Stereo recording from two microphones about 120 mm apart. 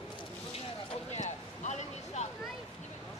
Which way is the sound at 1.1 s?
75° left (ahead or behind).